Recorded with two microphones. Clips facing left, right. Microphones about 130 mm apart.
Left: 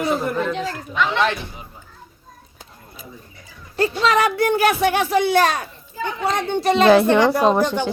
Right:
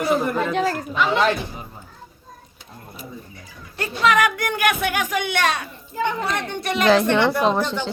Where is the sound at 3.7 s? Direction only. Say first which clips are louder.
Left 1 dB; 30° left (ahead or behind).